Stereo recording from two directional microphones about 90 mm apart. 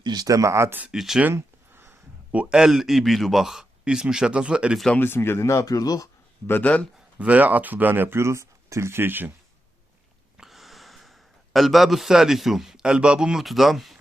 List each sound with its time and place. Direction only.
0.0 s speech: 50° right (ahead or behind); by 0.8 s 30° right (ahead or behind)
0.9 s speech: 5° right (ahead or behind)
1.3 s a sound: 30° right (ahead or behind)
2.4 s speech: 10° right (ahead or behind)
4.9 s speech: 25° left (ahead or behind); by 6.1 s 40° left (ahead or behind)
6.5 s speech: 15° left (ahead or behind)
7.2 s speech: 15° right (ahead or behind)
10.3 s speech: 5° right (ahead or behind)